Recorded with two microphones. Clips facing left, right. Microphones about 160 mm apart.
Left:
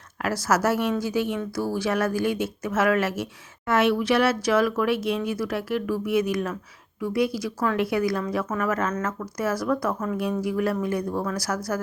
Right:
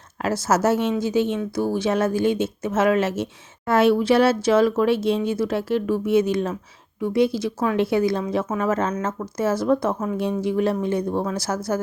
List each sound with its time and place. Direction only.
0.2 s speech: 25° right (ahead or behind)